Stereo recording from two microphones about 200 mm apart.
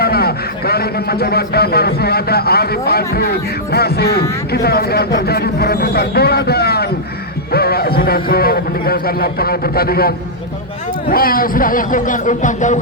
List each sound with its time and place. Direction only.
0.0 s a man's voice: 50° left (ahead or behind)